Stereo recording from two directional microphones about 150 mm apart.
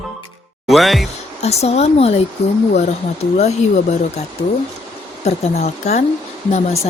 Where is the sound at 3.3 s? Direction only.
45° left (ahead or behind).